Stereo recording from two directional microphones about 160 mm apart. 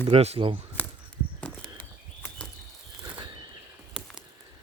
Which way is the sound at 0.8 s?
10° left (ahead or behind).